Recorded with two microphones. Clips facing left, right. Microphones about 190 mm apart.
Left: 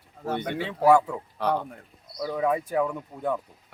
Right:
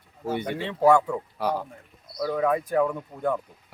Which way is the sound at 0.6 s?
5° left (ahead or behind).